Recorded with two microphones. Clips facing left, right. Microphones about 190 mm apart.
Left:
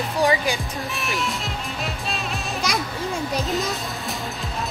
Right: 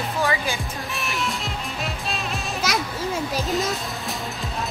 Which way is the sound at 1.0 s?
Centre (ahead or behind).